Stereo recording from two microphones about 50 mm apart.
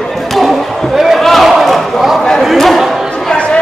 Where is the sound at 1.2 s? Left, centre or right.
Centre.